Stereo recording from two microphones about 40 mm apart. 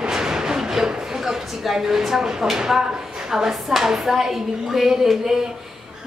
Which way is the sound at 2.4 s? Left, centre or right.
Centre.